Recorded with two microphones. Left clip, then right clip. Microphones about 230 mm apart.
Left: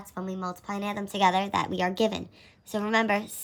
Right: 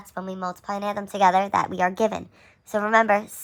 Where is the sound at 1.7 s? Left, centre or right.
Centre.